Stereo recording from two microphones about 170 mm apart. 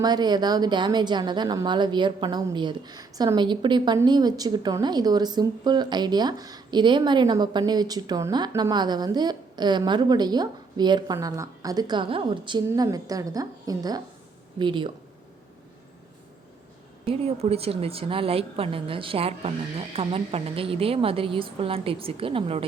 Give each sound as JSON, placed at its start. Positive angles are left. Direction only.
{"t": 0.0, "sound": "a woman's voice", "side_deg": -25}
{"t": 17.1, "sound": "a woman's voice", "side_deg": -35}